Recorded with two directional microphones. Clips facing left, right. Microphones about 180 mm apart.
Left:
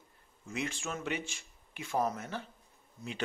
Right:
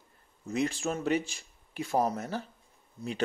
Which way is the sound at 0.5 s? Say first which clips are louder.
Right 7 dB; 35° right (ahead or behind).